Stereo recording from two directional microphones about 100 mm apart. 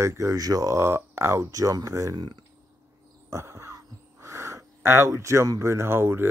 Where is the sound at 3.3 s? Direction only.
30° right (ahead or behind).